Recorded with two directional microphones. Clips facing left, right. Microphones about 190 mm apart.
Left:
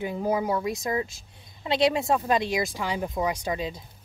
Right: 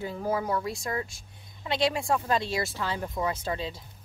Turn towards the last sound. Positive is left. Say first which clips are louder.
# left 3 dB
turn(degrees=15)  # may be behind; listen again after turning